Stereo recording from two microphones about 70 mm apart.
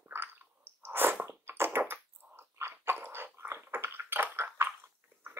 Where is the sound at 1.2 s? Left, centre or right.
Right.